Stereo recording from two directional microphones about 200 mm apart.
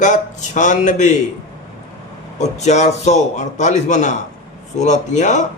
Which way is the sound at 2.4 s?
35° left (ahead or behind).